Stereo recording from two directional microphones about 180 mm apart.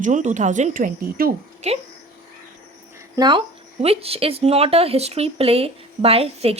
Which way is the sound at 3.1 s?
25° right (ahead or behind).